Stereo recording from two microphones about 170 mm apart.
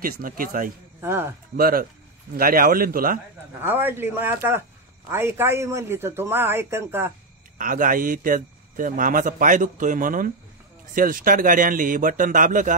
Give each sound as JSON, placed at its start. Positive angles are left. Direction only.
{"t": 0.0, "sound": "speech", "side_deg": -55}
{"t": 1.0, "sound": "a man's voice", "side_deg": -15}
{"t": 1.6, "sound": "speech", "side_deg": -60}
{"t": 3.6, "sound": "a man's voice", "side_deg": -10}
{"t": 7.5, "sound": "a man's voice", "side_deg": -55}